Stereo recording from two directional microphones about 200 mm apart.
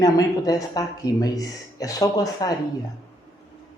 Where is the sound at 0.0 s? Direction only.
20° left (ahead or behind).